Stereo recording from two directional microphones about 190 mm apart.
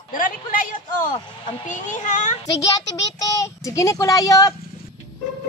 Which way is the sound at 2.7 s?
20° left (ahead or behind).